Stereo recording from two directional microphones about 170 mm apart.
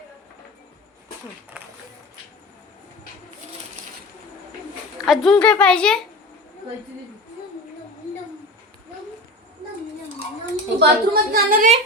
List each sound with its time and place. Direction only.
1.5 s a sound: 10° right (ahead or behind)
5.0 s a woman's voice: centre (ahead or behind)
10.8 s a woman's voice: 65° right (ahead or behind)